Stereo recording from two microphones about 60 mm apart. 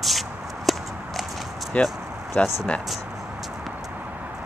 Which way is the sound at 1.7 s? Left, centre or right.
Left.